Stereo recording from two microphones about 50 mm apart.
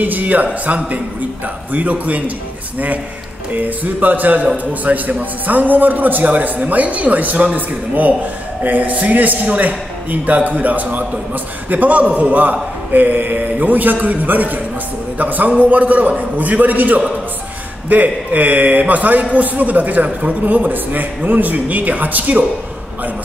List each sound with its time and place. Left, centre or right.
0.0 s a man's voice: right
3.5 s a man's voice: right